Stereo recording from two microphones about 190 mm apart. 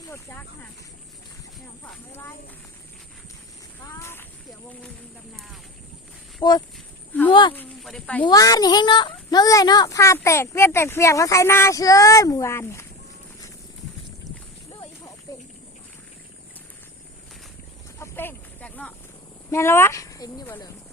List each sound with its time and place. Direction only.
0.1 s speech: 15° left (ahead or behind)
1.8 s speech: 10° left (ahead or behind)
3.9 s speech: 15° left (ahead or behind)
6.4 s a child's voice: 25° left (ahead or behind)
6.7 s a sound: 10° left (ahead or behind)
7.3 s a child's voice: 25° left (ahead or behind)
7.5 s speech: 5° left (ahead or behind)
8.3 s a child's voice: 20° left (ahead or behind)
18.0 s a sound: 10° left (ahead or behind)
19.5 s a woman's voice: 15° left (ahead or behind)